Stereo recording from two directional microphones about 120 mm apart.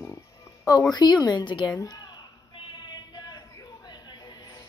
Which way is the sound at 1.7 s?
30° left (ahead or behind).